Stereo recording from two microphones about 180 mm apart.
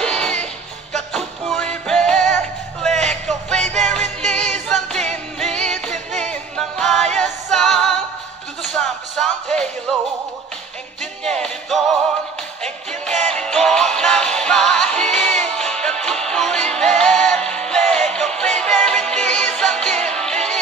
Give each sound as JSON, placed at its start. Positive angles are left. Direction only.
{"t": 0.0, "sound": "music", "side_deg": 5}
{"t": 3.5, "sound": "music", "side_deg": -40}
{"t": 4.2, "sound": "music", "side_deg": 5}
{"t": 5.9, "sound": "music", "side_deg": -40}
{"t": 6.5, "sound": "music", "side_deg": 0}
{"t": 11.2, "sound": "music", "side_deg": 5}
{"t": 13.3, "sound": "music", "side_deg": 5}
{"t": 15.0, "sound": "music", "side_deg": -40}
{"t": 15.7, "sound": "music", "side_deg": 5}